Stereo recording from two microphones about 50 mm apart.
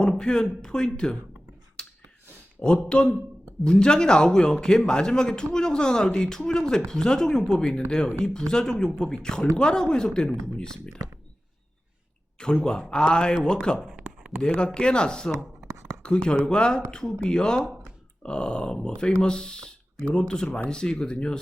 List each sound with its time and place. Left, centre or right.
0.0 s speech: centre
1.8 s finger snapping: centre
3.6 s speech: centre
12.4 s speech: centre
15.6 s a sound: right
16.0 s speech: centre